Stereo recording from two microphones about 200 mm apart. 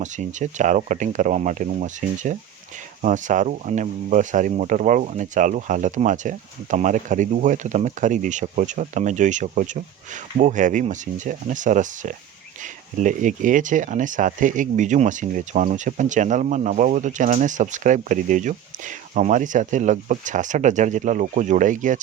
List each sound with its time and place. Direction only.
0.0 s speech: 35° right (ahead or behind)